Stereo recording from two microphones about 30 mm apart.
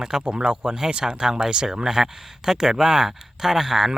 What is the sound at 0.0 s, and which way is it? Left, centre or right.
Speech, right.